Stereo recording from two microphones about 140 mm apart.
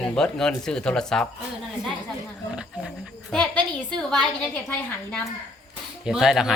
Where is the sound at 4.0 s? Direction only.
5° left (ahead or behind).